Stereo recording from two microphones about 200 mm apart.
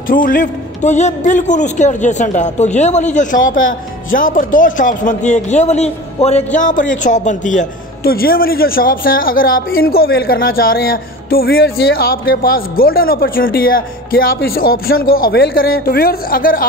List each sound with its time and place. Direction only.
0.1 s a man's voice: 45° left (ahead or behind)